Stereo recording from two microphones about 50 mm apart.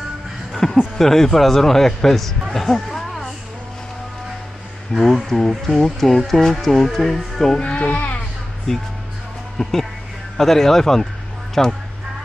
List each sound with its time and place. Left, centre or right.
0.5 s a sound: centre
0.9 s speech: centre
2.5 s a sound: centre
4.9 s speech: centre
7.5 s speech: left
9.6 s speech: centre